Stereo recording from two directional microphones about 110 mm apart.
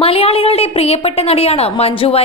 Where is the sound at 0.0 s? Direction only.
60° left (ahead or behind).